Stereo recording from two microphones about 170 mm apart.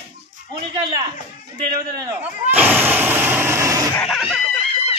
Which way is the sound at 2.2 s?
10° right (ahead or behind).